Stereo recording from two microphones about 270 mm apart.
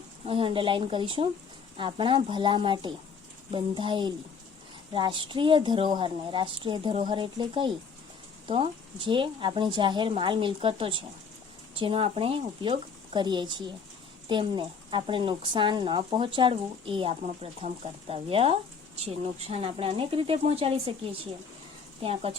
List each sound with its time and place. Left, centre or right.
0.3 s a woman's voice: centre
22.0 s speech: right